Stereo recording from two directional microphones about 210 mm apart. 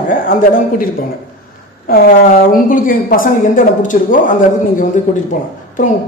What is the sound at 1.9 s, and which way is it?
A woman's voice, 45° left (ahead or behind).